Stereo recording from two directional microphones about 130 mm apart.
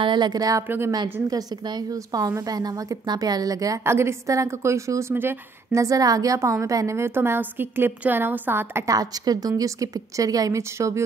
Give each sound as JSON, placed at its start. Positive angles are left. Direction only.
{"t": 0.0, "sound": "a woman's voice", "side_deg": -35}
{"t": 1.3, "sound": "a woman's voice", "side_deg": -30}